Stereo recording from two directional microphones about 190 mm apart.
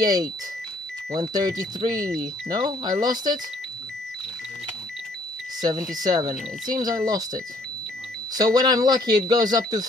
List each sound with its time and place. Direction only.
0.0 s speech: 20° right (ahead or behind)
1.9 s speech: 5° left (ahead or behind)
2.5 s speech: 20° right (ahead or behind)
5.6 s speech: 20° right (ahead or behind)
8.4 s speech: 20° right (ahead or behind)